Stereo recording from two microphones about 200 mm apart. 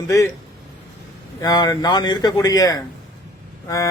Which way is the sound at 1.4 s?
20° left (ahead or behind).